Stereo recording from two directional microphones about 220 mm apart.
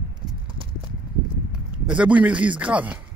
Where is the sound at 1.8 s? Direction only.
5° right (ahead or behind).